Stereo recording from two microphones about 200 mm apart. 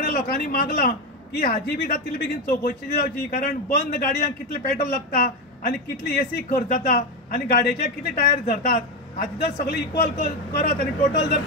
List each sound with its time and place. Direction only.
0.0 s a man's voice: 45° left (ahead or behind)